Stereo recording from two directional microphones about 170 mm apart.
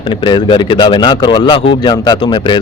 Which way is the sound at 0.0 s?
30° left (ahead or behind).